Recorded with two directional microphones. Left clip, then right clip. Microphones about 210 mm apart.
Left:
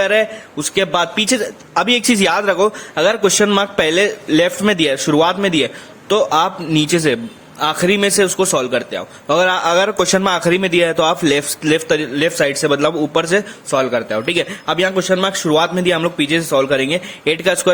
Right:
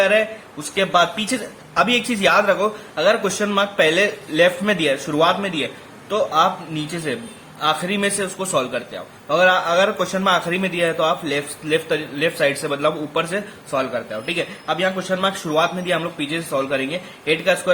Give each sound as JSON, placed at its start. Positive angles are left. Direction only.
{"t": 0.0, "sound": "a man's voice", "side_deg": 50}